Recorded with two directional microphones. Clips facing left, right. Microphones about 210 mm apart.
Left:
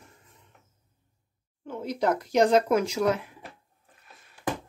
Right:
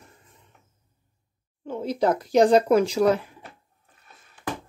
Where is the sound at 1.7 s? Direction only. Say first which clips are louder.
Right 3 dB; 30° right (ahead or behind).